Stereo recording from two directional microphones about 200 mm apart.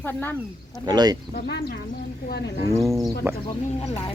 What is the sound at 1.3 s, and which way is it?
Speech, 55° left (ahead or behind).